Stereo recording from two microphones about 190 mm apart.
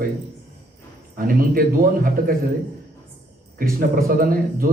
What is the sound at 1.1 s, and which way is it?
A man's voice, 50° right (ahead or behind).